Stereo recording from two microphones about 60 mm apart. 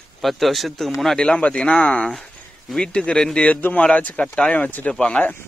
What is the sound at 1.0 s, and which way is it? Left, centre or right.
A man's voice, centre.